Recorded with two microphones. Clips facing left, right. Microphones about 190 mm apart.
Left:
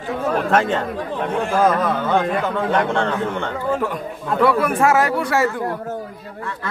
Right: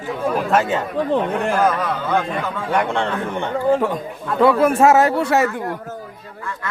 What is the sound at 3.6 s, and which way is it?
A man's voice, 30° right (ahead or behind).